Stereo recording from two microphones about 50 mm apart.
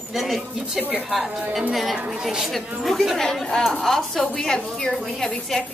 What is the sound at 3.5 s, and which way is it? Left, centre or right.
A woman's voice, centre.